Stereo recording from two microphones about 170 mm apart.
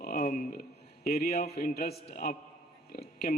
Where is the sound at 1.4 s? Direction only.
65° left (ahead or behind).